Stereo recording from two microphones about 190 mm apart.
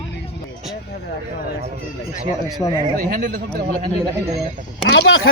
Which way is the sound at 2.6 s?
20° left (ahead or behind).